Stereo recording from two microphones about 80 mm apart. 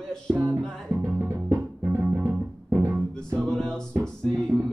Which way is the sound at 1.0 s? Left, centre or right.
Centre.